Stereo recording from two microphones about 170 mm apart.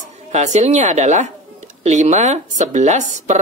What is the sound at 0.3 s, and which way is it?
Speech, 40° right (ahead or behind).